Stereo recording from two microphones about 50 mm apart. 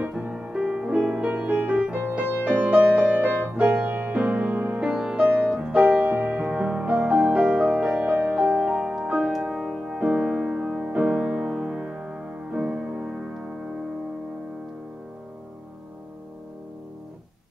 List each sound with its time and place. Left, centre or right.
0.0 s music: right
0.3 s music: centre; by 4.7 s right
4.7 s music: centre
5.2 s music: right; by 13.6 s centre